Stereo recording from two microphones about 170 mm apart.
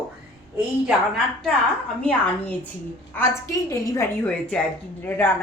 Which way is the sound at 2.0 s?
10° left (ahead or behind).